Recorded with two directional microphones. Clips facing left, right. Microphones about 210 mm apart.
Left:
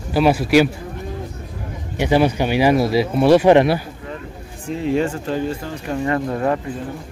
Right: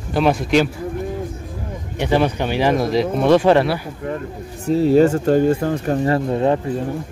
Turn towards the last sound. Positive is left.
turn(degrees=-25)  # may be behind; listen again after turning